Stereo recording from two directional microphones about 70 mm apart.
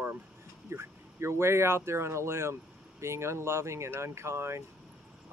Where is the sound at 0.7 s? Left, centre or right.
Right.